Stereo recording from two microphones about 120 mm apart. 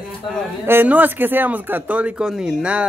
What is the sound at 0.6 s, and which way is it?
Speech, 15° right (ahead or behind).